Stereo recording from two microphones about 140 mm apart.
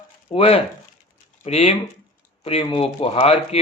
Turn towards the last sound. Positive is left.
turn(degrees=45)  # may be behind; listen again after turning